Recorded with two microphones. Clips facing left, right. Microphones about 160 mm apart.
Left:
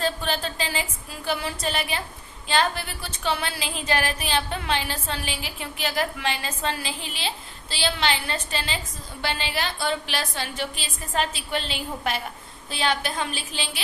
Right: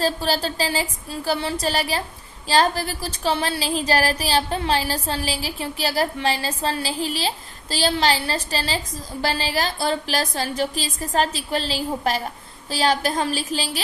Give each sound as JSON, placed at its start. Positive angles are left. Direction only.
{"t": 0.0, "sound": "a woman's voice", "side_deg": -35}